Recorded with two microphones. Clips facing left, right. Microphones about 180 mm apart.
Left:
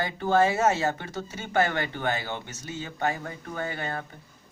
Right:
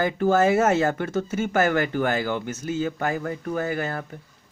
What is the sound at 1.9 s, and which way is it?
Speech, 90° right.